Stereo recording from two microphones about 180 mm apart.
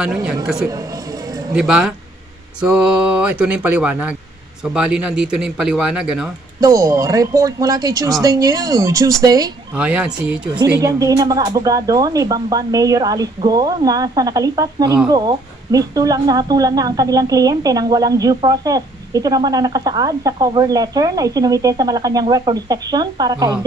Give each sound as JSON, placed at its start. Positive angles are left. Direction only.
{"t": 1.5, "sound": "speech", "side_deg": -5}
{"t": 6.6, "sound": "speech", "side_deg": -20}
{"t": 9.8, "sound": "speech", "side_deg": -5}
{"t": 10.8, "sound": "speech", "side_deg": -20}